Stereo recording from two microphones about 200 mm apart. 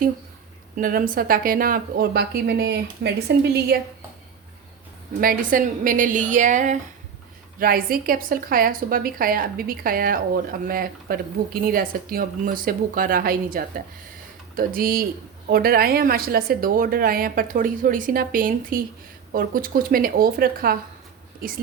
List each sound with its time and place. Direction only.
0.8 s speech: 45° right (ahead or behind)
5.2 s a woman's voice: 45° right (ahead or behind)